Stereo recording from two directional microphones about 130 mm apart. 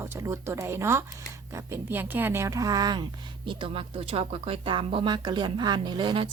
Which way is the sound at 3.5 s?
40° right (ahead or behind).